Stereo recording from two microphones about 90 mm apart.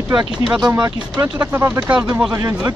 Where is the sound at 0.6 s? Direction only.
45° right (ahead or behind).